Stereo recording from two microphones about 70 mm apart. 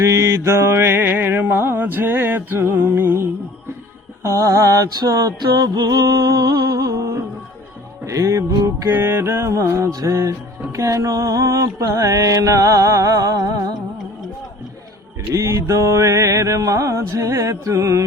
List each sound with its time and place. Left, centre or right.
0.0 s music: right
4.2 s mantra: right
5.0 s music: right
8.0 s mantra: right
8.9 s music: right
9.9 s mantra: right
15.3 s mantra: right